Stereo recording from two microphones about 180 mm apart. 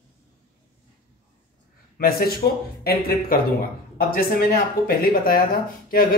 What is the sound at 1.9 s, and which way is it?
Speech, 55° left (ahead or behind).